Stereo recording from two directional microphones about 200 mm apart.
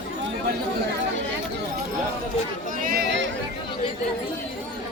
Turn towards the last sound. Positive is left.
turn(degrees=-55)  # may be behind; listen again after turning